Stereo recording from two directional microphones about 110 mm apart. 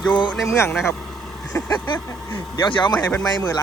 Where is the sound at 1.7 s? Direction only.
45° left (ahead or behind).